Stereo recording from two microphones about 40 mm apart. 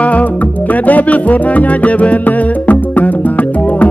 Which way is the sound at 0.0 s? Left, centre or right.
Left.